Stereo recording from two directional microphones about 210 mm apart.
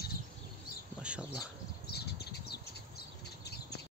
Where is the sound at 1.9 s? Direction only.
50° left (ahead or behind).